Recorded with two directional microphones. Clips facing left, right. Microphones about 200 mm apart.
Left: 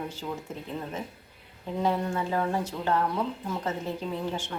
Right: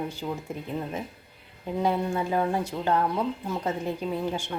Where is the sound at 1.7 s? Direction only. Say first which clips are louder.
Right 2 dB; 15° right (ahead or behind).